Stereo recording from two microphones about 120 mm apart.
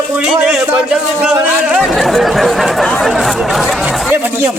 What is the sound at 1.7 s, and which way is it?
A man's voice, centre (ahead or behind).